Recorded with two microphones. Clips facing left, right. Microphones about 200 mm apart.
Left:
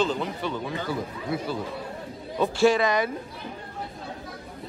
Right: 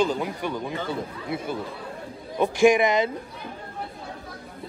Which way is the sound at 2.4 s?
15° right (ahead or behind).